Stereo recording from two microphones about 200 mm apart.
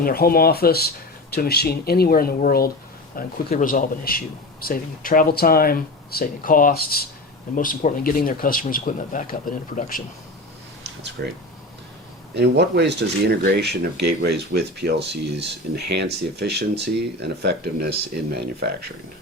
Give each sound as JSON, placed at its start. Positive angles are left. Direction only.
{"t": 0.0, "sound": "speech", "side_deg": 50}
{"t": 11.2, "sound": "speech", "side_deg": -55}